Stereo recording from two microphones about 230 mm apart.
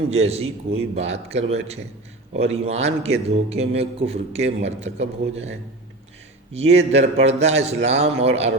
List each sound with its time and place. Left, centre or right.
0.1 s a man's voice: right
6.5 s a man's voice: right